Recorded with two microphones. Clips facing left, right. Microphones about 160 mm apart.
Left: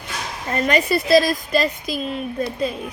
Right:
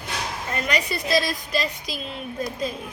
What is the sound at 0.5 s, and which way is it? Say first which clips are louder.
A woman's voice: left 8 dB; 45° left (ahead or behind).